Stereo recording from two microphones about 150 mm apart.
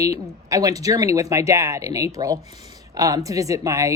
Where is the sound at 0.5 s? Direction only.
20° right (ahead or behind).